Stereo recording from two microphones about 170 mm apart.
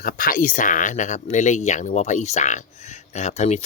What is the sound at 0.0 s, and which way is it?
Speech, 55° left (ahead or behind).